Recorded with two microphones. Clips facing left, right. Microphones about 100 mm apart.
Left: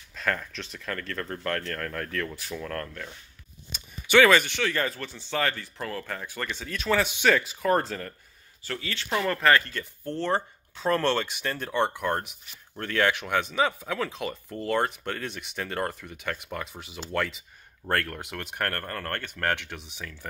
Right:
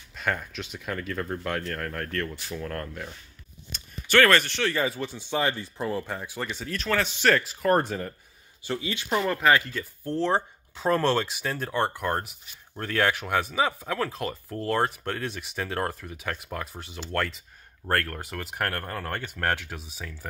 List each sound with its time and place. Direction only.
0.1 s speech: 5° right (ahead or behind)
3.7 s speech: 10° left (ahead or behind)
4.7 s speech: 10° right (ahead or behind)
6.6 s speech: centre (ahead or behind)